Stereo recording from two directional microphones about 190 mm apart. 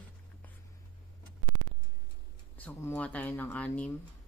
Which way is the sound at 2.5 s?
10° left (ahead or behind).